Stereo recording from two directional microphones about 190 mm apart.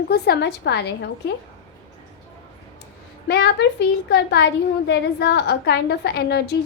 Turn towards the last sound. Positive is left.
turn(degrees=60)  # may be behind; listen again after turning